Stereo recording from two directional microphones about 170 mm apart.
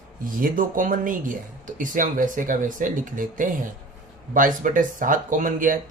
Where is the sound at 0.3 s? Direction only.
55° right (ahead or behind).